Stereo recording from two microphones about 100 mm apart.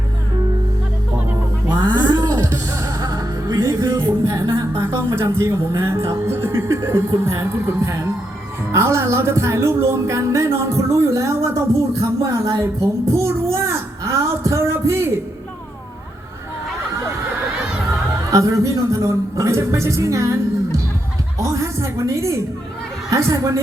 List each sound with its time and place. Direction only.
1.6 s music: 45° right (ahead or behind); by 4.6 s 30° right (ahead or behind)
4.8 s speech: 25° right (ahead or behind)
13.1 s a sound: 30° right (ahead or behind)
18.3 s a woman's voice: 35° right (ahead or behind)